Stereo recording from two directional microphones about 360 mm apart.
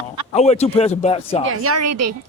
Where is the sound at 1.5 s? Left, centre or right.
Right.